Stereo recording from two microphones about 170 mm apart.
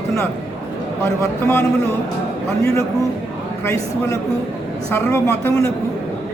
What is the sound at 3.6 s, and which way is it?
A man's voice, 15° left (ahead or behind).